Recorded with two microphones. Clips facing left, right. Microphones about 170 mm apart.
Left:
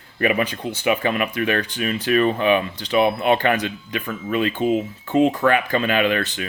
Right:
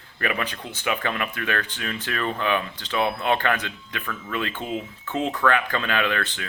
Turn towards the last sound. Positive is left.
turn(degrees=15)  # may be behind; listen again after turning